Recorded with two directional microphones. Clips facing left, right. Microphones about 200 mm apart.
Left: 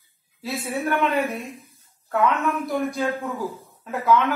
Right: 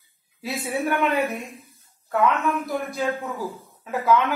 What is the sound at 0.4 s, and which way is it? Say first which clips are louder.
Speech: right 1 dB; 15° right (ahead or behind).